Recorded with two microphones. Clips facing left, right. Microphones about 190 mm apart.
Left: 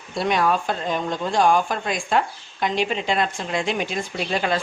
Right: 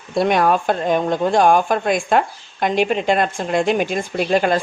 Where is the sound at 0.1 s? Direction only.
50° right (ahead or behind).